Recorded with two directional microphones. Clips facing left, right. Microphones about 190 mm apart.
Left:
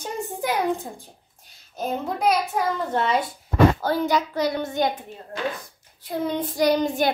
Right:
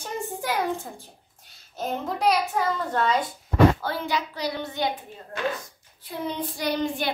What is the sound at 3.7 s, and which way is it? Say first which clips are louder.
A child's voice: left 6 dB; 40° left (ahead or behind).